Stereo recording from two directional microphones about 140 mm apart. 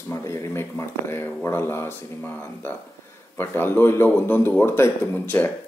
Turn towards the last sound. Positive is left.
turn(degrees=15)  # may be behind; listen again after turning